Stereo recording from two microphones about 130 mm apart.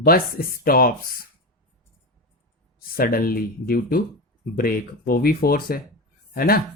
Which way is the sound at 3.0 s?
90° left.